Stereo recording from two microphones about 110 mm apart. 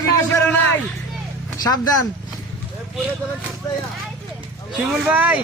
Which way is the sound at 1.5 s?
35° left (ahead or behind).